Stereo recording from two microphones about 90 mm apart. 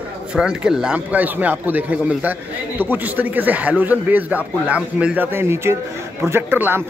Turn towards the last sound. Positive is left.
turn(degrees=-25)  # may be behind; listen again after turning